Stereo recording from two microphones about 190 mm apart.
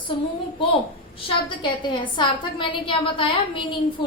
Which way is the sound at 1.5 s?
25° left (ahead or behind).